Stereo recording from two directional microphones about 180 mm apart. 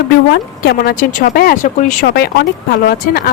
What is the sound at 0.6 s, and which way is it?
Speech, 60° left (ahead or behind).